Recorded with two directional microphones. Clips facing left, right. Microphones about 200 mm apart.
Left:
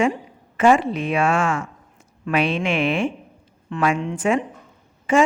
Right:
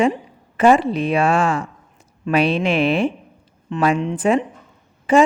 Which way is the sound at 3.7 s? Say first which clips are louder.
Right 3 dB; 20° right (ahead or behind).